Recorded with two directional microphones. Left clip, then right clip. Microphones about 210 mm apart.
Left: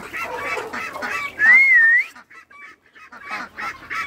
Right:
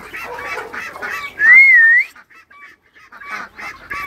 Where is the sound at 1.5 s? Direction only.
15° left (ahead or behind).